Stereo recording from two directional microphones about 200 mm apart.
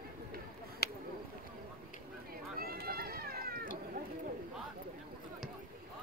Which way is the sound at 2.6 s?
50° right (ahead or behind).